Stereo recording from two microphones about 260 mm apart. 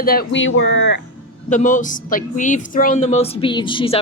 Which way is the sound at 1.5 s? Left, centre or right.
Left.